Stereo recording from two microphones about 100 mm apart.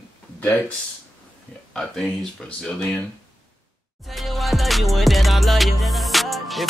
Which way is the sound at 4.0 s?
Centre (ahead or behind).